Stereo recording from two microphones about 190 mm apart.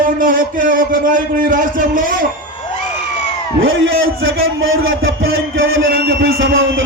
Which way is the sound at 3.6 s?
90° right.